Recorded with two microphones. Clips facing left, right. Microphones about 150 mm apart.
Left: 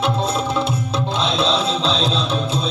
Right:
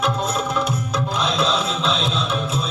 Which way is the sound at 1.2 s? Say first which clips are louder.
Left 2 dB; 25° left (ahead or behind).